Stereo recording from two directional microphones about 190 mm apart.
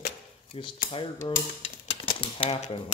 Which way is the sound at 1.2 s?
25° left (ahead or behind).